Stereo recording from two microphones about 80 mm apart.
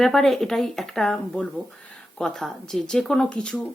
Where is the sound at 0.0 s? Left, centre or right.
Centre.